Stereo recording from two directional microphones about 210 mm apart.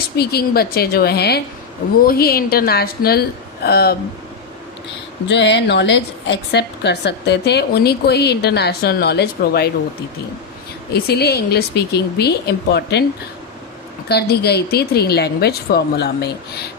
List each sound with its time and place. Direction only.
0.2 s a woman's voice: 50° left (ahead or behind)
5.3 s a woman's voice: 55° left (ahead or behind)
10.9 s a woman's voice: 50° left (ahead or behind)
14.1 s a woman's voice: 50° left (ahead or behind)